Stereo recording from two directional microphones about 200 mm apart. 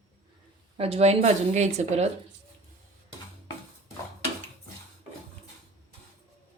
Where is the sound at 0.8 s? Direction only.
30° right (ahead or behind).